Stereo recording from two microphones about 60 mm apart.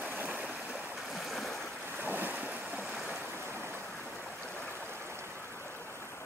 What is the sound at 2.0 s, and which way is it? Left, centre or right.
Waves, right.